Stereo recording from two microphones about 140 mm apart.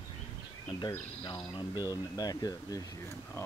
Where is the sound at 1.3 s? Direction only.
30° left (ahead or behind).